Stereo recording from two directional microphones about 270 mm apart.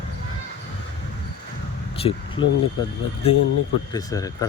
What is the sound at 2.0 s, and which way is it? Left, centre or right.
Speech, centre.